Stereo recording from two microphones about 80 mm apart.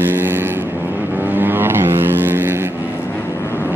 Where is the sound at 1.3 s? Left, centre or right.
Right.